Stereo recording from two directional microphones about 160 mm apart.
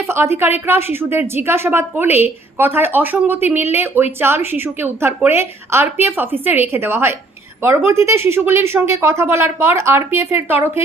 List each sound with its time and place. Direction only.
0.1 s a woman's voice: 15° right (ahead or behind)